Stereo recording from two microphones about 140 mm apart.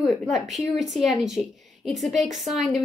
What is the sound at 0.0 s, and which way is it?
Speech, centre (ahead or behind).